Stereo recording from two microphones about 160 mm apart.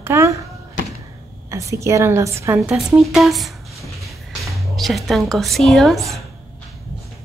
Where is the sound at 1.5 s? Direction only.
20° right (ahead or behind).